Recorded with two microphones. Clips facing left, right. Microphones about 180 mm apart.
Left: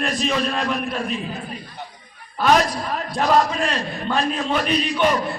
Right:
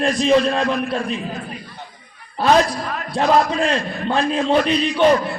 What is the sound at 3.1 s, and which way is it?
A man's voice, 30° right (ahead or behind).